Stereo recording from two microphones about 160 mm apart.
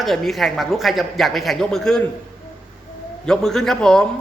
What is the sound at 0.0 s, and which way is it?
A man's voice, centre (ahead or behind).